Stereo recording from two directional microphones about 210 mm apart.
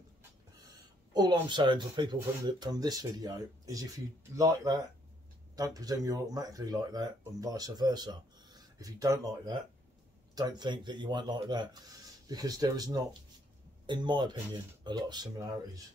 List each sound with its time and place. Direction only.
1.1 s speech: 20° right (ahead or behind)